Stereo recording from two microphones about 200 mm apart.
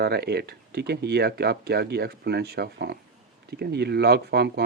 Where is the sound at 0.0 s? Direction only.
55° right (ahead or behind).